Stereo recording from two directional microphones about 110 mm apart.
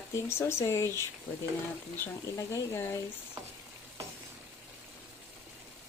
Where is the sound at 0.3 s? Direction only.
25° left (ahead or behind).